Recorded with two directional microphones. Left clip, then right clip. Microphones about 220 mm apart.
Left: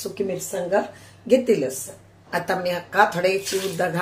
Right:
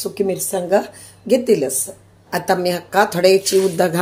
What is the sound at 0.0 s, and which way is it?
Speech, 35° right (ahead or behind).